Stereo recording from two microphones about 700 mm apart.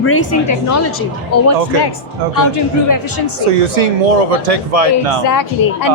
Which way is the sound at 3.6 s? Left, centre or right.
Right.